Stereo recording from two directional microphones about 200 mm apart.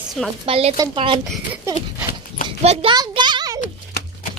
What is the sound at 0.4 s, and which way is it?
Speech, 30° right (ahead or behind).